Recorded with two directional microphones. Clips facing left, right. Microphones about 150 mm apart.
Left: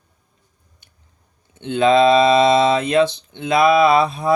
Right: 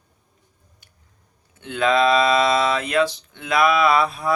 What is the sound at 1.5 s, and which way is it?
Speech, 25° left (ahead or behind).